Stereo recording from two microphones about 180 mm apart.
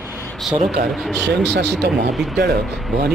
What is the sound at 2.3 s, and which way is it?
Speech, 70° right (ahead or behind).